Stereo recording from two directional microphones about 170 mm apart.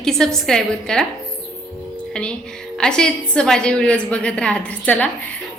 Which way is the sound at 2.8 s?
5° left (ahead or behind).